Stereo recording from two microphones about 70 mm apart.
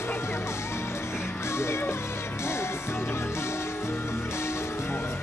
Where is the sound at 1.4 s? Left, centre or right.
Left.